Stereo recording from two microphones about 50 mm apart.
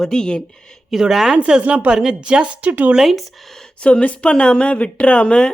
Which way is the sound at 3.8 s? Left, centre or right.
Left.